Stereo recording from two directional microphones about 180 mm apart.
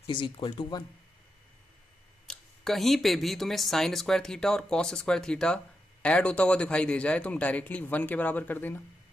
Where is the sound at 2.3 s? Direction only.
Centre (ahead or behind).